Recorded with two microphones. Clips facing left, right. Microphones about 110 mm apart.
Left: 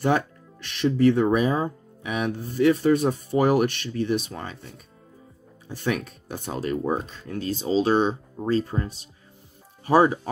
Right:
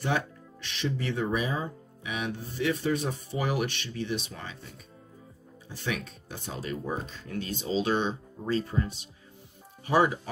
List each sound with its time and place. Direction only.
0.0 s speech: 50° left (ahead or behind)
5.7 s speech: 45° left (ahead or behind)